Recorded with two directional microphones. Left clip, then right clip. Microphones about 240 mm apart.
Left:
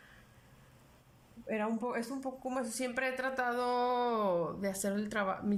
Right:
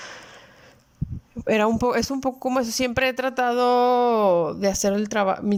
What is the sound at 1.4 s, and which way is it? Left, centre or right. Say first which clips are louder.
Speech: right 15 dB; right.